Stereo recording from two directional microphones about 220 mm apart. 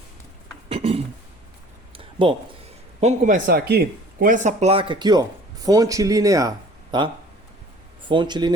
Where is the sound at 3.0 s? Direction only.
30° right (ahead or behind).